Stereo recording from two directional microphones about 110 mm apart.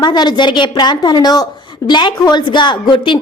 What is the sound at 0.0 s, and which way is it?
A woman's voice, 40° left (ahead or behind).